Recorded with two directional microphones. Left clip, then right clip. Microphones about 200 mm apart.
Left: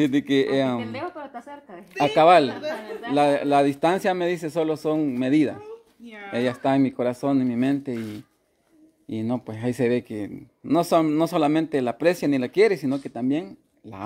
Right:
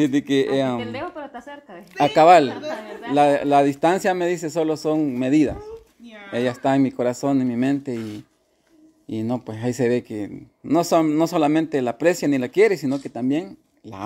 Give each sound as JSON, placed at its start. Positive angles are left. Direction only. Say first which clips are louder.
{"t": 0.0, "sound": "speech", "louder": "right 1 dB", "side_deg": 0}
{"t": 0.9, "sound": "a sound", "louder": "right 2 dB", "side_deg": -35}
{"t": 2.0, "sound": "speech", "louder": "right 3 dB", "side_deg": -10}
{"t": 9.1, "sound": "speech", "louder": "right 2 dB", "side_deg": -5}